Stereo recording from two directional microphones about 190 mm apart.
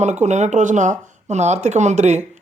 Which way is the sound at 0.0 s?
35° right (ahead or behind).